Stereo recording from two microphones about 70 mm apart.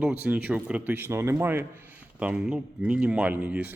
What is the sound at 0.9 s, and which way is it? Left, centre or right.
Speech, right.